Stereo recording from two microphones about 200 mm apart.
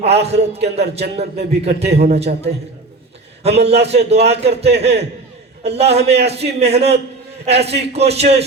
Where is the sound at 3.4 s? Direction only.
30° right (ahead or behind).